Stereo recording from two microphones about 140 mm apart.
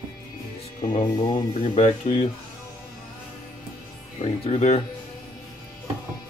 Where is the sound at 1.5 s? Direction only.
55° left (ahead or behind).